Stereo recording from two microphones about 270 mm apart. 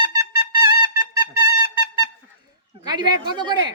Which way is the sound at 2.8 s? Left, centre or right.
Centre.